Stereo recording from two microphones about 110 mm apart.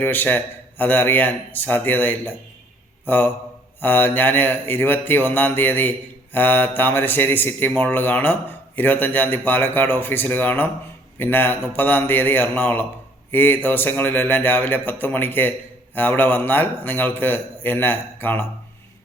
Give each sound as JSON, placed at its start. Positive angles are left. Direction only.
{"t": 0.0, "sound": "speech", "side_deg": 15}